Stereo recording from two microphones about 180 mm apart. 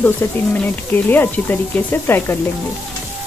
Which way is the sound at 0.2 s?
10° left (ahead or behind).